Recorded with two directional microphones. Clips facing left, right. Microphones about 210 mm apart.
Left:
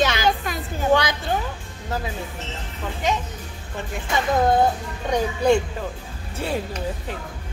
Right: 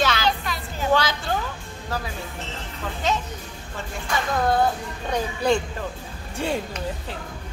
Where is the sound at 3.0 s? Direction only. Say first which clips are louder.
Left 1 dB; 15° left (ahead or behind).